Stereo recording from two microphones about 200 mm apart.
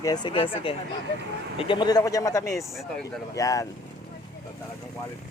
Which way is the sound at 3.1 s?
15° left (ahead or behind).